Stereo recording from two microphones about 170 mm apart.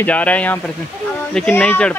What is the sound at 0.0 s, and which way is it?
Speech, 10° left (ahead or behind).